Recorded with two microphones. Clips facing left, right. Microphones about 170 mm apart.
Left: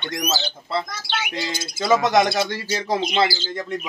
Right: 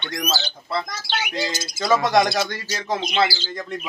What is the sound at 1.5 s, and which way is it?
Bird, 55° left (ahead or behind).